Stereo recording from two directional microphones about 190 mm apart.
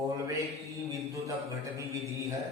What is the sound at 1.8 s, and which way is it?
Speech, 15° right (ahead or behind).